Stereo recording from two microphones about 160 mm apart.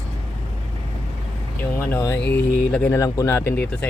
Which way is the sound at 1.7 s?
15° left (ahead or behind).